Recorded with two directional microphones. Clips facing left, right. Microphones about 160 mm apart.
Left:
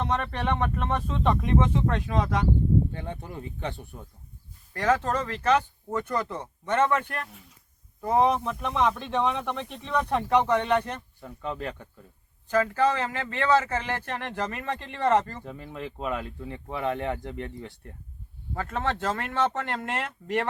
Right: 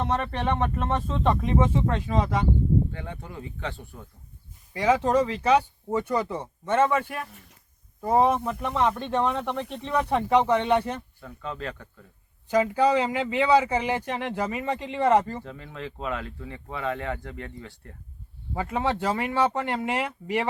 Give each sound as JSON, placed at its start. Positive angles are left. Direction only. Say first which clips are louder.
{"t": 0.0, "sound": "speech", "louder": "right 1 dB", "side_deg": -5}
{"t": 3.2, "sound": "speech", "louder": "left 1 dB", "side_deg": 20}
{"t": 4.7, "sound": "speech", "louder": "right 3 dB", "side_deg": -10}
{"t": 11.2, "sound": "speech", "louder": "left 1 dB", "side_deg": 20}
{"t": 12.5, "sound": "speech", "louder": "right 2 dB", "side_deg": -10}
{"t": 15.4, "sound": "speech", "louder": "left 1 dB", "side_deg": 15}
{"t": 18.5, "sound": "speech", "louder": "right 3 dB", "side_deg": -10}